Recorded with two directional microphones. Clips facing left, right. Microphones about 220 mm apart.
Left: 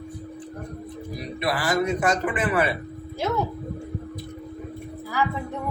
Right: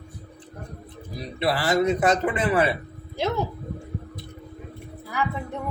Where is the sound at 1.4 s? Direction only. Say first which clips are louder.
Right 2 dB; 25° right (ahead or behind).